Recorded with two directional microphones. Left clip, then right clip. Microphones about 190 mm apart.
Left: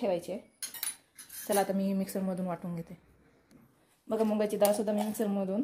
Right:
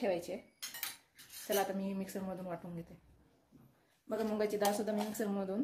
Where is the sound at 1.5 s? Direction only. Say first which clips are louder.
Left 6 dB; 40° left (ahead or behind).